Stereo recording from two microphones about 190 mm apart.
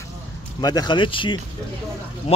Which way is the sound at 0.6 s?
20° left (ahead or behind).